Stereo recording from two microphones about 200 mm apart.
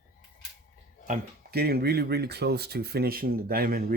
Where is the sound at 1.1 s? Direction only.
50° right (ahead or behind).